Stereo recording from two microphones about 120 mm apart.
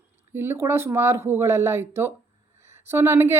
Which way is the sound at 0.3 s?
20° right (ahead or behind).